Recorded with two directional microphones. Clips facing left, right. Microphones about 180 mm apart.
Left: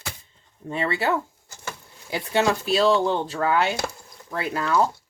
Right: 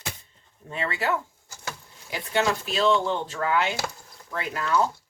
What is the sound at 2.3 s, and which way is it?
Speech, 35° left (ahead or behind).